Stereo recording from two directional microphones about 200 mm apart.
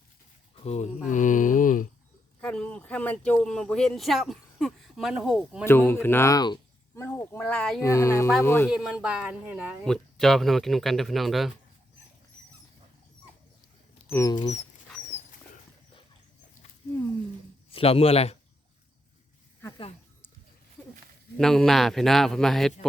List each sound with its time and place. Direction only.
0.6 s speech: 35° left (ahead or behind)
2.4 s speech: 5° left (ahead or behind)
5.6 s speech: 10° left (ahead or behind)
8.7 s speech: 5° right (ahead or behind)
14.1 s speech: 15° left (ahead or behind)
17.7 s a man's voice: 30° left (ahead or behind)
19.6 s a woman's voice: 20° left (ahead or behind)
21.3 s speech: centre (ahead or behind)